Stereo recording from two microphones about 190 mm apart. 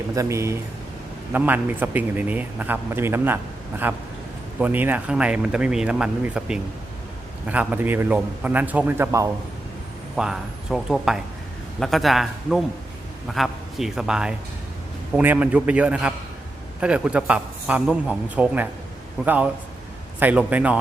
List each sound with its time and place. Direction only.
0.2 s a man's voice: 15° right (ahead or behind)
10.2 s a man's voice: centre (ahead or behind)